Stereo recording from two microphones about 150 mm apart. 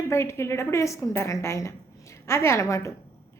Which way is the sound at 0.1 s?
20° left (ahead or behind).